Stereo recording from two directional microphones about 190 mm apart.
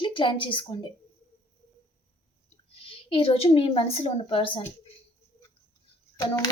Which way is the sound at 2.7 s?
30° left (ahead or behind).